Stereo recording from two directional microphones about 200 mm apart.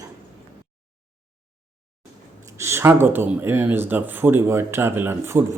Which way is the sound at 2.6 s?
15° right (ahead or behind).